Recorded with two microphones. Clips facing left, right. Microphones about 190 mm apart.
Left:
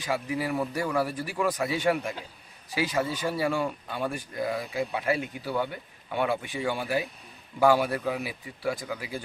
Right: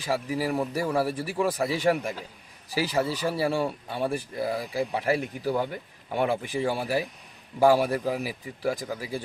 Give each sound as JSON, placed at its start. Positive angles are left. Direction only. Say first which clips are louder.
{"t": 0.0, "sound": "a man's voice", "louder": "right 2 dB", "side_deg": -35}